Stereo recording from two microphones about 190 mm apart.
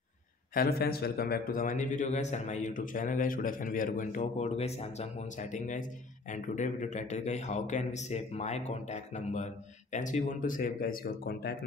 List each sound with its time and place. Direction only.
0.6 s a man's voice: 55° left (ahead or behind)